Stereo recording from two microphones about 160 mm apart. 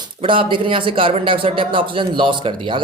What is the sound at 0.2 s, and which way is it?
A man's voice, 35° right (ahead or behind).